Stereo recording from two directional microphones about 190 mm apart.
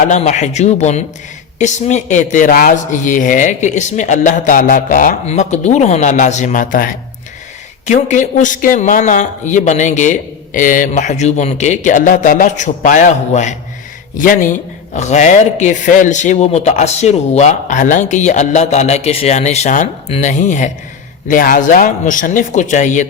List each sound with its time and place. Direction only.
0.1 s a man's voice: 35° left (ahead or behind)